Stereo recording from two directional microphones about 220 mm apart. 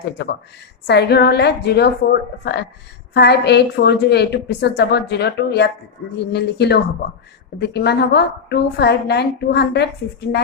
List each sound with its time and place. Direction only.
0.9 s a woman's voice: 50° left (ahead or behind)